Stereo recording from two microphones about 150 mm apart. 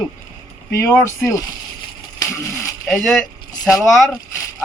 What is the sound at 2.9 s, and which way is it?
Speech, 5° left (ahead or behind).